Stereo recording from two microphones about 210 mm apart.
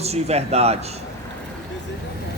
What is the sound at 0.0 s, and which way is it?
Speech, 30° right (ahead or behind).